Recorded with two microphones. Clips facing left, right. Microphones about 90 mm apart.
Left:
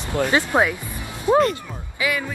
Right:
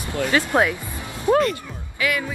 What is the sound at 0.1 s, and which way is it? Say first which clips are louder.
Speech: left 1 dB; 20° left (ahead or behind).